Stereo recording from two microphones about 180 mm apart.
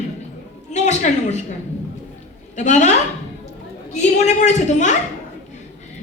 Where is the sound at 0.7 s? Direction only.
40° left (ahead or behind).